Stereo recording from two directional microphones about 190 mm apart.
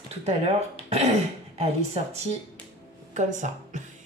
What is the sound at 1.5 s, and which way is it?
A woman's voice, 35° right (ahead or behind).